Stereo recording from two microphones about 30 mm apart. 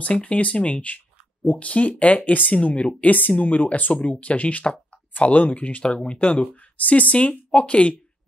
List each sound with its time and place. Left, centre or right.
0.0 s speech: left
1.7 s speech: left
3.9 s speech: left
6.0 s speech: left
6.8 s speech: left